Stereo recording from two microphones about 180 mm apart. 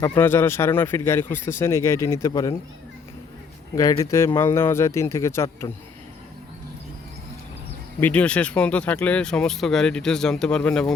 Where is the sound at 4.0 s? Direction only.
15° left (ahead or behind).